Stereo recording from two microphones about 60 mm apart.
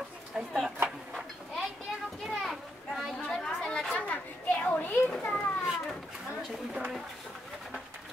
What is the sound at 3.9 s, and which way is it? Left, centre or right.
A child's voice, left.